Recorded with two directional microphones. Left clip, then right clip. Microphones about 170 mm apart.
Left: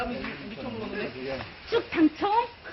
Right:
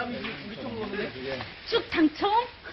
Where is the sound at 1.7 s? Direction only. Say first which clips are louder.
Left 1 dB; 80° right.